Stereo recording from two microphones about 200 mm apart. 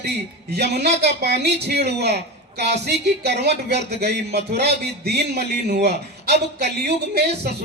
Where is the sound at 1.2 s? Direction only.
55° right (ahead or behind).